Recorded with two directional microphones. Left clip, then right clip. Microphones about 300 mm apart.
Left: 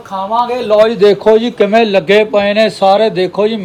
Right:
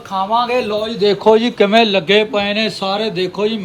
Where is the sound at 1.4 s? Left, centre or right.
Right.